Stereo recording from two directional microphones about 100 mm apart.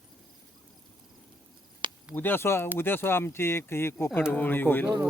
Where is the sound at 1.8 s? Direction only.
55° right (ahead or behind).